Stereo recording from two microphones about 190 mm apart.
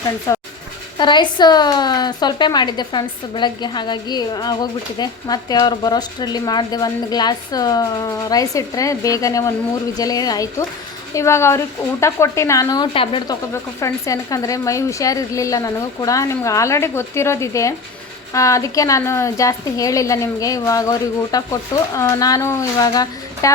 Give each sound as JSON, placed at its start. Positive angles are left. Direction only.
{"t": 0.3, "sound": "a woman's voice", "side_deg": 15}
{"t": 13.5, "sound": "a woman's voice", "side_deg": 15}